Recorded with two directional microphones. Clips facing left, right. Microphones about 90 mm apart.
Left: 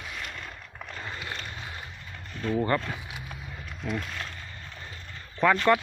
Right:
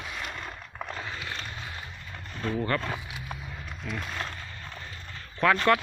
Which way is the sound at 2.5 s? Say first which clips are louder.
Left 3 dB; 20° left (ahead or behind).